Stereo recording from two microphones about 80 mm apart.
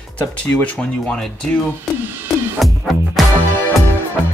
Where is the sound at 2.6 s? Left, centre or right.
Centre.